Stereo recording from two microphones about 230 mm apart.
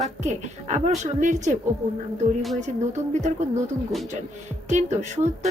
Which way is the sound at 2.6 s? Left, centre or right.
Right.